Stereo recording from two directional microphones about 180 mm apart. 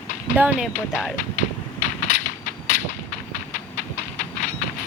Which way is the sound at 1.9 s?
45° left (ahead or behind).